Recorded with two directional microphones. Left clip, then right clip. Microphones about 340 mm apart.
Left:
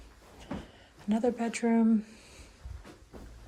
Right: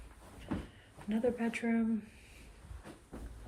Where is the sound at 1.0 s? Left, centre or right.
Centre.